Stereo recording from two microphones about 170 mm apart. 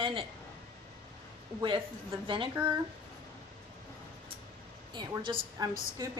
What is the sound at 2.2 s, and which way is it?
Speech, 30° right (ahead or behind).